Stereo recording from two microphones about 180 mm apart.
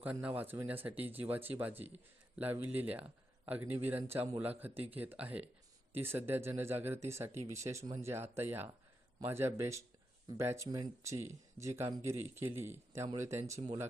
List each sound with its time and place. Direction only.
0.0 s speech: 10° right (ahead or behind)